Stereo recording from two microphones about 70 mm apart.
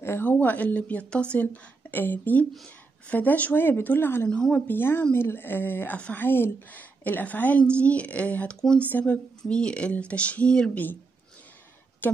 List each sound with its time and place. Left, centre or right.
0.0 s a woman's voice: left
4.3 s speech: centre
4.6 s a woman's voice: left; by 10.8 s centre
12.0 s a woman's voice: left